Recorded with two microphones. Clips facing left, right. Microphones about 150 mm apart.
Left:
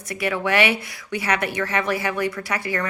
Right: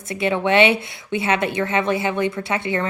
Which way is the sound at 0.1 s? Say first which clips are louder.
Right 4 dB; 25° right (ahead or behind).